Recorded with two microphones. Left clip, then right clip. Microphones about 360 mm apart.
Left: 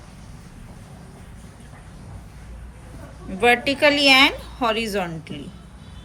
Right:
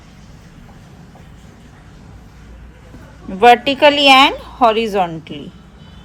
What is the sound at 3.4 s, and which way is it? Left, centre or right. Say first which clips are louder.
A woman's voice: right 8 dB; centre.